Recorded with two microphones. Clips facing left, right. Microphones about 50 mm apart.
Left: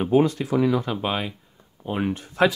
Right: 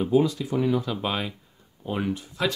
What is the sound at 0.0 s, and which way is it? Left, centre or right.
Speech, left.